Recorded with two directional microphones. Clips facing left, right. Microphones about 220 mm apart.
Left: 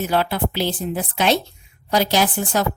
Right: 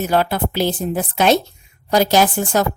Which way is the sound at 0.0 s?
45° right (ahead or behind).